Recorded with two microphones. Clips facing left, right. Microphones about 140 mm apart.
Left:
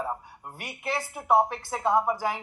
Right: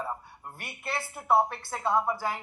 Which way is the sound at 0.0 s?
15° left (ahead or behind).